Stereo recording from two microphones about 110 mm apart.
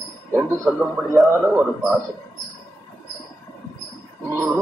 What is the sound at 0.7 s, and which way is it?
Speech, 10° right (ahead or behind).